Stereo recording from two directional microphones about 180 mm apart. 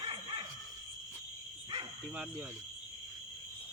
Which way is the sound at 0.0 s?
30° right (ahead or behind).